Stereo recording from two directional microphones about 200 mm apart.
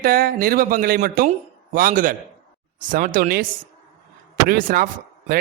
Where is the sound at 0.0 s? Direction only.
45° right (ahead or behind).